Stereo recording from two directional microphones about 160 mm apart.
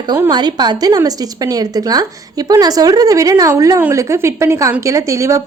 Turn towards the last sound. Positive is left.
turn(degrees=-20)  # may be behind; listen again after turning